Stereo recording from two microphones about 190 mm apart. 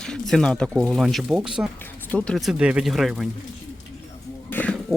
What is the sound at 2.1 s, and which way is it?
Speech, 5° left (ahead or behind).